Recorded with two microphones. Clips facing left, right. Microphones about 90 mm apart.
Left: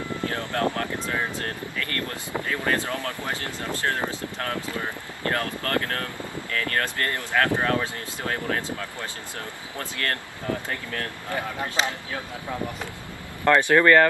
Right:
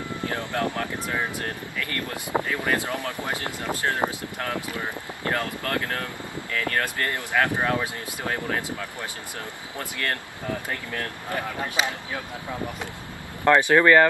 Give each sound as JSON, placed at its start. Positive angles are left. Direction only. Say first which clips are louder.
{"t": 0.2, "sound": "a sound", "louder": "even", "side_deg": -15}
{"t": 0.7, "sound": "speech", "louder": "even", "side_deg": -15}
{"t": 9.8, "sound": "speech", "louder": "even", "side_deg": -15}
{"t": 13.4, "sound": "speech", "louder": "right 1 dB", "side_deg": -15}